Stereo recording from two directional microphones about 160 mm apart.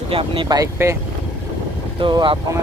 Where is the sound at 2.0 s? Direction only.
30° right (ahead or behind).